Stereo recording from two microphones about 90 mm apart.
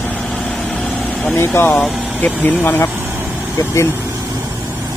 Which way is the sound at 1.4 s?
25° left (ahead or behind).